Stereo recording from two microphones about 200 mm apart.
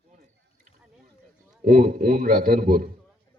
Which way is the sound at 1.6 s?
45° right (ahead or behind).